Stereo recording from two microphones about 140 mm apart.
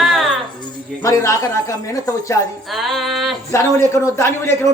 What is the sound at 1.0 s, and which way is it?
Speech, 25° left (ahead or behind).